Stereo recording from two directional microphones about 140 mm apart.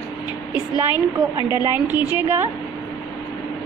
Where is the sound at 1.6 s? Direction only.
15° right (ahead or behind).